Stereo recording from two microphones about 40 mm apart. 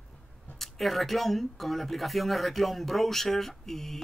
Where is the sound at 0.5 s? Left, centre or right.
Centre.